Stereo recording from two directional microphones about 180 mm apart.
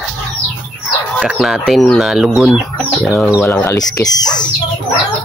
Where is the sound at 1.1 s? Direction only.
Centre (ahead or behind).